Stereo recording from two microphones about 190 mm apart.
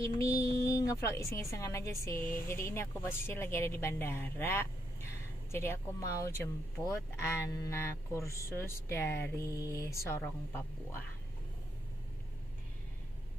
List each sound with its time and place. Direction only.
0.0 s a woman's voice: 15° left (ahead or behind)